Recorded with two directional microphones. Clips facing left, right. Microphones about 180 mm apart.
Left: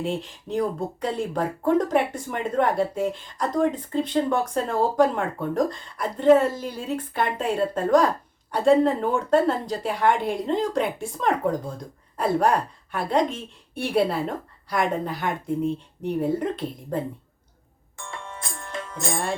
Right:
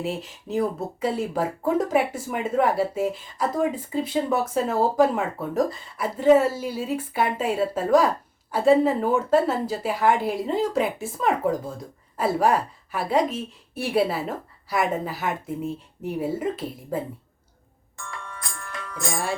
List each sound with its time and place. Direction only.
0.0 s a woman's voice: 5° right (ahead or behind)
18.0 s music: 25° left (ahead or behind)